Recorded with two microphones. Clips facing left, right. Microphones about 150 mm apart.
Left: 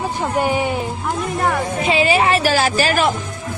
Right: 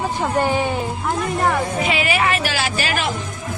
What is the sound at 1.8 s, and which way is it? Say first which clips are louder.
A woman's voice: left 4 dB; 30° left (ahead or behind).